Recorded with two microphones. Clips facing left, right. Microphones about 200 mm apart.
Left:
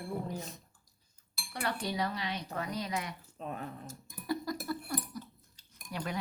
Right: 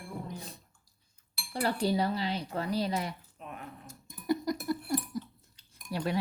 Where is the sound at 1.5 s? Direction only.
30° right (ahead or behind).